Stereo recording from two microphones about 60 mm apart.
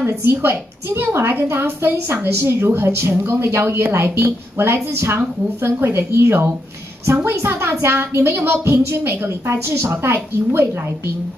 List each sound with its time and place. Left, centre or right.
0.0 s a woman's voice: right